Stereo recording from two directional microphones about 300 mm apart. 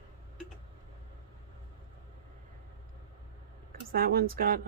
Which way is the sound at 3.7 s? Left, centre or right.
Right.